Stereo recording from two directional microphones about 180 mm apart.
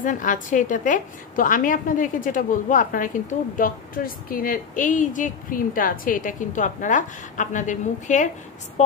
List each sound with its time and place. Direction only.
0.0 s a woman's voice: 45° left (ahead or behind)